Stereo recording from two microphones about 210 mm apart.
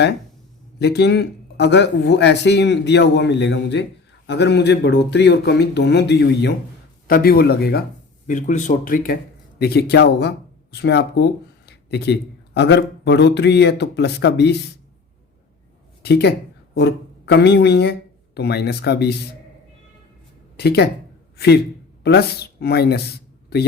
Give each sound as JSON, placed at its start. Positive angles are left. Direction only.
{"t": 0.8, "sound": "speech", "side_deg": 50}
{"t": 8.3, "sound": "speech", "side_deg": 35}
{"t": 16.0, "sound": "speech", "side_deg": 50}
{"t": 20.6, "sound": "a man's voice", "side_deg": 50}